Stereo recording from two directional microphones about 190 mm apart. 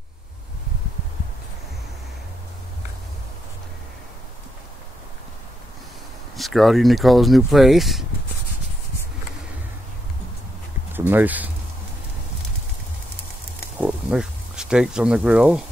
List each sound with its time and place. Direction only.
6.3 s speech: centre (ahead or behind)
10.9 s speech: 10° right (ahead or behind)
13.7 s a sound: 5° right (ahead or behind)